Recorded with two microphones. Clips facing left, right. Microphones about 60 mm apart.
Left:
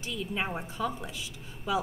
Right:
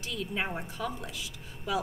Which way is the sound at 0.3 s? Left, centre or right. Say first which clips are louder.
Left 1 dB; centre.